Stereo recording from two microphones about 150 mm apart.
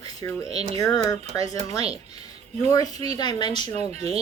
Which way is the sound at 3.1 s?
30° left (ahead or behind).